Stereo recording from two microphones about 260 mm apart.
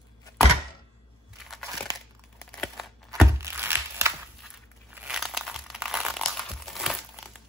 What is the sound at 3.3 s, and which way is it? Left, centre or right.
Music, centre.